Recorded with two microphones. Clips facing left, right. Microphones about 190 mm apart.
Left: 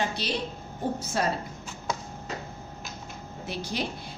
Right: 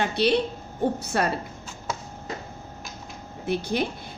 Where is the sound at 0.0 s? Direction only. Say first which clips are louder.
Right 8 dB; 60° right (ahead or behind).